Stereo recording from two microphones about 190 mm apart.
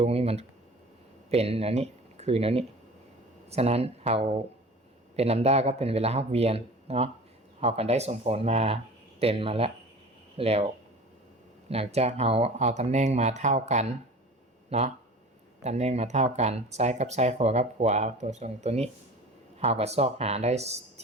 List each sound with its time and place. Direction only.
0.0 s speech: 30° right (ahead or behind)
11.7 s speech: 35° right (ahead or behind)